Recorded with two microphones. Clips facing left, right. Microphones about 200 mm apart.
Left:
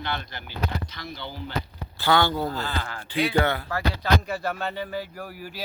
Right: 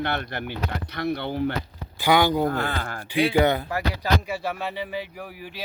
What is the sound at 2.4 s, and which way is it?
Speech, 55° right (ahead or behind).